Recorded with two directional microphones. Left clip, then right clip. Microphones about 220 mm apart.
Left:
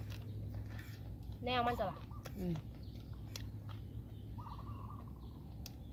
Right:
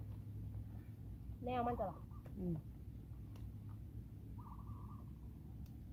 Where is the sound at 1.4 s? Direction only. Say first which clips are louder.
Left 4 dB; centre (ahead or behind).